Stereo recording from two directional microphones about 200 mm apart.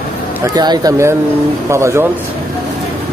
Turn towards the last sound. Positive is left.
turn(degrees=-15)  # may be behind; listen again after turning